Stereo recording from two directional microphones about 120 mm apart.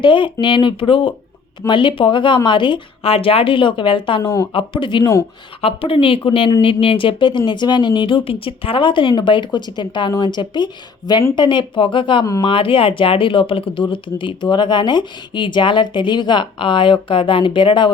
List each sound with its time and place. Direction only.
0.0 s speech: 40° left (ahead or behind)
12.2 s speech: 30° left (ahead or behind)
12.5 s speech: 45° left (ahead or behind)